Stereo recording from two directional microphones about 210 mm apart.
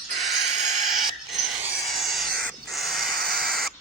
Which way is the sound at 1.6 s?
Centre (ahead or behind).